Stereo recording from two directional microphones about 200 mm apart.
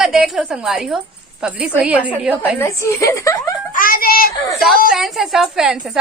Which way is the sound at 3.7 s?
45° left (ahead or behind).